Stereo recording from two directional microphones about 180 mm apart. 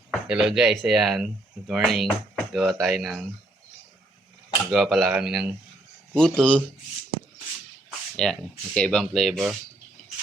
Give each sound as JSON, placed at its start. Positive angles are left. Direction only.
{"t": 0.1, "sound": "speech", "side_deg": -5}
{"t": 4.7, "sound": "speech", "side_deg": 0}
{"t": 8.1, "sound": "speech", "side_deg": 5}